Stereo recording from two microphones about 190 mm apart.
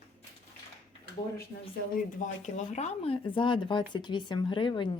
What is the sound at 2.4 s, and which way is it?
A woman's voice, 35° left (ahead or behind).